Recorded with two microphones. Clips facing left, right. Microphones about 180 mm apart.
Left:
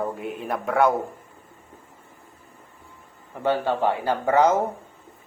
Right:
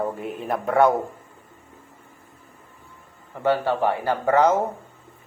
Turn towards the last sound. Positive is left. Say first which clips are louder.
# right 1 dB
turn(degrees=15)  # may be behind; listen again after turning